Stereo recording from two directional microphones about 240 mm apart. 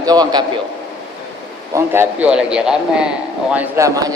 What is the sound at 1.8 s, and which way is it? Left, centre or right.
A man's voice, centre.